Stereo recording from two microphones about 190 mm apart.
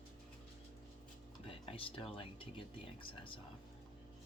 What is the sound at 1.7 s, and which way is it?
Speech, 30° left (ahead or behind).